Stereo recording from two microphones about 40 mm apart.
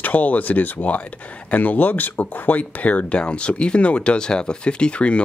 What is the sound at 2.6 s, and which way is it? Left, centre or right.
Speech, left.